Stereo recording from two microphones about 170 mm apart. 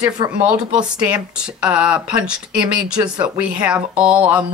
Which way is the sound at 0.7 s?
5° right (ahead or behind).